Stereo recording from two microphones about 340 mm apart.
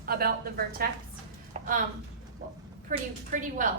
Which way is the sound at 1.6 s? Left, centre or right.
Right.